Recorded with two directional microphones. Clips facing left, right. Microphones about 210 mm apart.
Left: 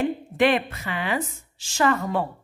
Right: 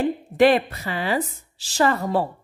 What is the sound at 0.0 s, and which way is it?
A woman's voice, 35° right (ahead or behind).